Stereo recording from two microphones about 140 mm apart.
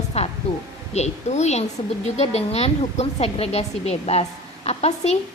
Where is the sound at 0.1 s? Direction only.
50° left (ahead or behind).